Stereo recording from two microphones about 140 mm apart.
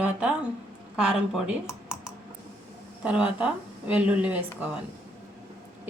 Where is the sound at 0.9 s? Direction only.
5° right (ahead or behind).